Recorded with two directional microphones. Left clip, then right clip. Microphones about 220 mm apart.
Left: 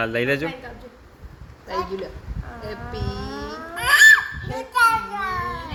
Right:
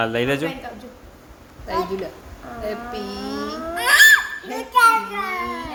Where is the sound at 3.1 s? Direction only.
25° right (ahead or behind).